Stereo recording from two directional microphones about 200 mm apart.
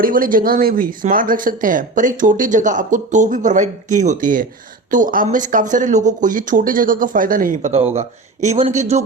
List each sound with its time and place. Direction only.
0.0 s speech: 45° right (ahead or behind)